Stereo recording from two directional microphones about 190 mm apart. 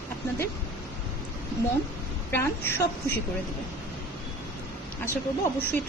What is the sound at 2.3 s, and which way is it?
Speech, 10° left (ahead or behind).